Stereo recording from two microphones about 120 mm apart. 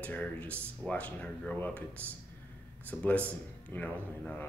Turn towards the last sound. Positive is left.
turn(degrees=10)  # may be behind; listen again after turning